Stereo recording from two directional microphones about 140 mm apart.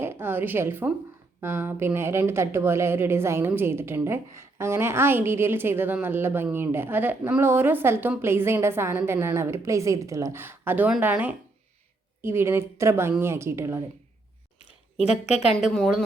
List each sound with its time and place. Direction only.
0.0 s a woman's voice: 15° right (ahead or behind)
15.0 s a woman's voice: 5° right (ahead or behind)